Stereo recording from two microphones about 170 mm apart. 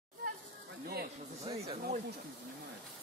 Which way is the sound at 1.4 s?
35° right (ahead or behind).